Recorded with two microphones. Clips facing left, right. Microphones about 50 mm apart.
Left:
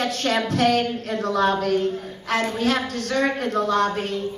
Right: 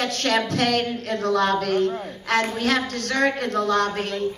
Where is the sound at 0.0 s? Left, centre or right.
Centre.